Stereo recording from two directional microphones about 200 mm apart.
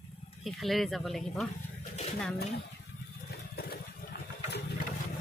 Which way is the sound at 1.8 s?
35° left (ahead or behind).